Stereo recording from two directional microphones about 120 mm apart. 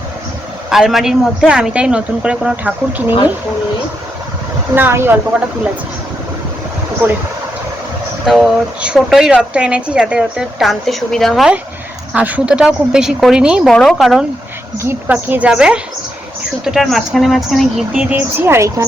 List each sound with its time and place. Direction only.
0.7 s a woman's voice: centre (ahead or behind)
4.7 s speech: 20° right (ahead or behind)
8.3 s a woman's voice: 5° right (ahead or behind)
14.8 s a woman's voice: 20° right (ahead or behind)